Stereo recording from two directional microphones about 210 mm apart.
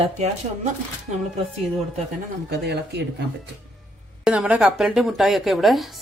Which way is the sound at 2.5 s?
50° right (ahead or behind).